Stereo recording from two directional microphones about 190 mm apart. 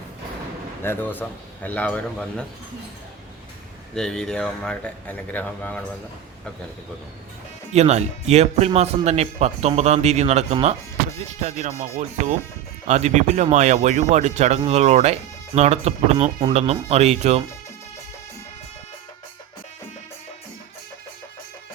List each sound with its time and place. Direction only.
0.8 s speech: 10° left (ahead or behind)
3.9 s speech: 5° left (ahead or behind)
7.7 s speech: 35° right (ahead or behind)